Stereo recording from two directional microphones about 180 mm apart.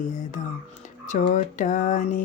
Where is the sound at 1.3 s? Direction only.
45° left (ahead or behind).